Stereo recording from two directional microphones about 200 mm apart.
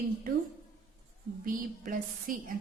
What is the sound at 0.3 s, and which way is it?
Speech, 45° right (ahead or behind).